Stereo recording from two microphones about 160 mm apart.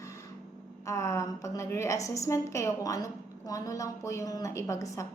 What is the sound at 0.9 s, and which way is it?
A woman's voice, 20° left (ahead or behind).